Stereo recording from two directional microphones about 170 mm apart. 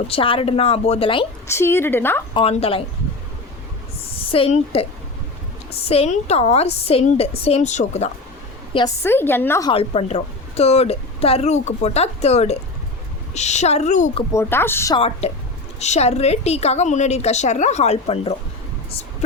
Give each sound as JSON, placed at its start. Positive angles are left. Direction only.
{"t": 0.1, "sound": "a woman's voice", "side_deg": 35}
{"t": 1.5, "sound": "a woman's voice", "side_deg": 15}
{"t": 2.3, "sound": "a woman's voice", "side_deg": 35}
{"t": 4.1, "sound": "a woman's voice", "side_deg": 35}
{"t": 8.7, "sound": "a woman's voice", "side_deg": 30}
{"t": 9.0, "sound": "a woman's voice", "side_deg": 15}
{"t": 9.6, "sound": "a woman's voice", "side_deg": 35}
{"t": 14.3, "sound": "a woman's voice", "side_deg": 15}
{"t": 14.9, "sound": "a woman's voice", "side_deg": 35}